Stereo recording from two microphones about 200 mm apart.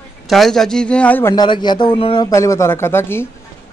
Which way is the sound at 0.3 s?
Centre (ahead or behind).